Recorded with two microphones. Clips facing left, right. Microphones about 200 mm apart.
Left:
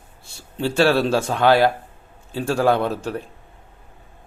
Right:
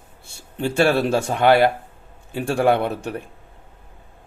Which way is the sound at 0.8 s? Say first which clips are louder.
Left 1 dB; 50° right (ahead or behind).